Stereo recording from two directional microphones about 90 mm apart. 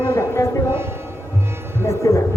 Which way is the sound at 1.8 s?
35° left (ahead or behind).